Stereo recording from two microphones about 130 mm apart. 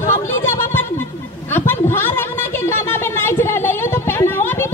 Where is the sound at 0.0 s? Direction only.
20° left (ahead or behind).